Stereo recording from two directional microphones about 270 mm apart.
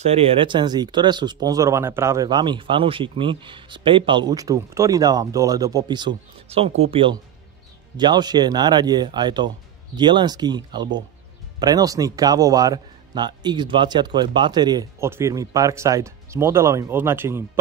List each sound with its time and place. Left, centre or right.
0.0 s speech: right